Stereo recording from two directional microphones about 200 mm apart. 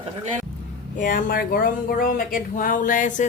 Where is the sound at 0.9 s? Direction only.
40° left (ahead or behind).